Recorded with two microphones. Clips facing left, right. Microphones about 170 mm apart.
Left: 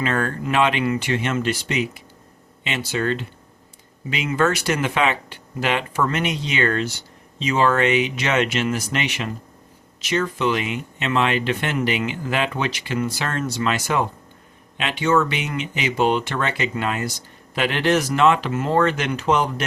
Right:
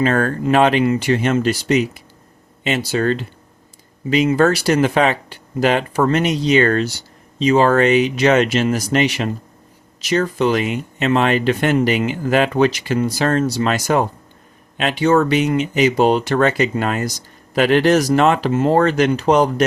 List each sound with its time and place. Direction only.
0.0 s speech: 40° right (ahead or behind)
4.3 s speech: 35° right (ahead or behind)